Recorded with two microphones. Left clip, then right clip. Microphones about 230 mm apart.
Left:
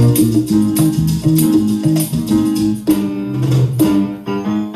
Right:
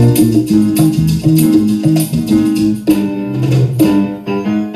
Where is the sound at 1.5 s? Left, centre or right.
Centre.